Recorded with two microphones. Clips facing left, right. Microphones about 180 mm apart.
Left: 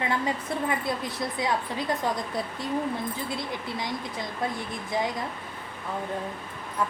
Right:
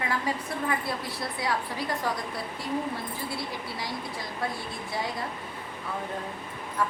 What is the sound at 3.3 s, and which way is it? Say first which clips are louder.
Speech: left 2 dB; 20° left (ahead or behind).